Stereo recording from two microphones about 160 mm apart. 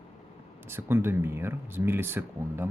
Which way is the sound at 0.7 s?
15° right (ahead or behind).